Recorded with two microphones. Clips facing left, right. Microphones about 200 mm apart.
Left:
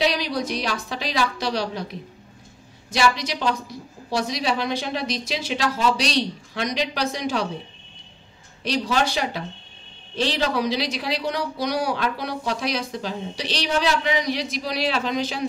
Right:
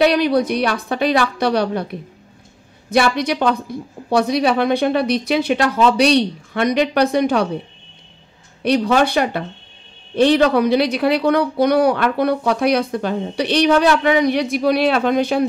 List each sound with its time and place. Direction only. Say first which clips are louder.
0.0 s a woman's voice: right 9 dB; 60° right (ahead or behind)
8.6 s a woman's voice: right 8 dB; 55° right (ahead or behind)